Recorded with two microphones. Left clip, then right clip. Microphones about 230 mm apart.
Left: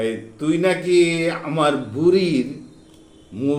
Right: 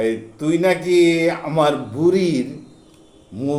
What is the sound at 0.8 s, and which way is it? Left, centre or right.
Speech, right.